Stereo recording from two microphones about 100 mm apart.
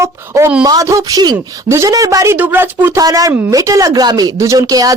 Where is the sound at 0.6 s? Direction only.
40° right (ahead or behind); by 3.0 s 20° right (ahead or behind).